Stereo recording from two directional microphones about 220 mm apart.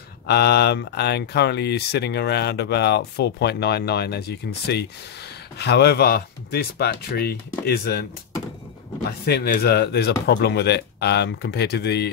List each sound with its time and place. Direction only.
0.3 s speech: 50° left (ahead or behind)
9.2 s speech: 45° left (ahead or behind)